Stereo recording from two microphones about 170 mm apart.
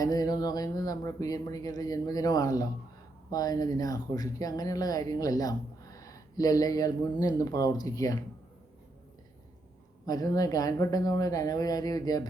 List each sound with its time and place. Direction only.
0.0 s speech: 20° left (ahead or behind)
10.1 s speech: 20° left (ahead or behind)